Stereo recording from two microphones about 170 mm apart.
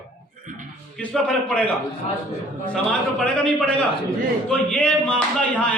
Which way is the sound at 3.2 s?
5° left (ahead or behind).